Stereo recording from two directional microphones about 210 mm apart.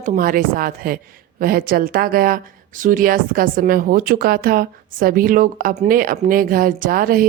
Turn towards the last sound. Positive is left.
turn(degrees=-45)  # may be behind; listen again after turning